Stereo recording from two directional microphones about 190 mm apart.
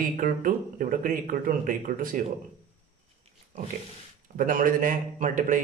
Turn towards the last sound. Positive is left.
turn(degrees=-45)  # may be behind; listen again after turning